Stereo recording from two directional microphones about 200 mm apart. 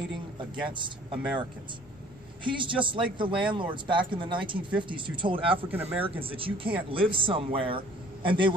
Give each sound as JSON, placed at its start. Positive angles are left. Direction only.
{"t": 0.4, "sound": "speech", "side_deg": -25}
{"t": 2.4, "sound": "speech", "side_deg": -25}
{"t": 5.7, "sound": "speech", "side_deg": -10}
{"t": 6.0, "sound": "speech", "side_deg": -25}